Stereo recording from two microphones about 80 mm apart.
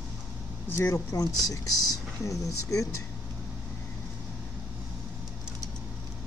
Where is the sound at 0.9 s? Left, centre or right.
Left.